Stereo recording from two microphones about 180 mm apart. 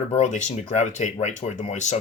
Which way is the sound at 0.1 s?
40° left (ahead or behind).